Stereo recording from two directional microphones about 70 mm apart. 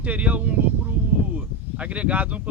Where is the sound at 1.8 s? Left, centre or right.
Centre.